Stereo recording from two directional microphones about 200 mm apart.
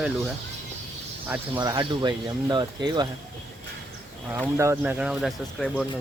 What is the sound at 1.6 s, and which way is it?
Speech, 20° right (ahead or behind).